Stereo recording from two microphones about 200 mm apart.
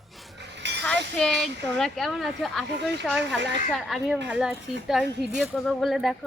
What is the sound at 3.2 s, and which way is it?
Speech, 60° right (ahead or behind).